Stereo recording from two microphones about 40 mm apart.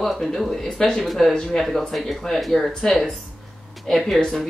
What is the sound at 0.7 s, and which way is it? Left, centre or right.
Speech, centre.